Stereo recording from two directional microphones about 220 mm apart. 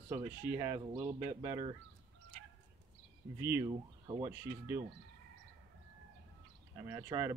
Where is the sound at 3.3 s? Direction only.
10° right (ahead or behind).